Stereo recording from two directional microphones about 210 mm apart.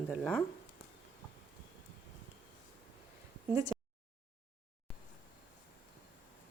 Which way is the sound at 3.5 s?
15° right (ahead or behind).